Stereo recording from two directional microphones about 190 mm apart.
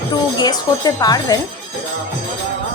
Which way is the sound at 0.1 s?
20° left (ahead or behind).